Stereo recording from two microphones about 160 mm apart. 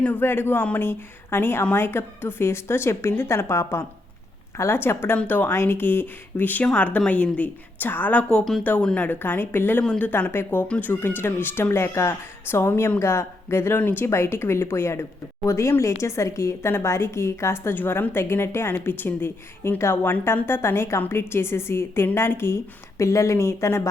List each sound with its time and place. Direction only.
0.0 s speech: 10° left (ahead or behind)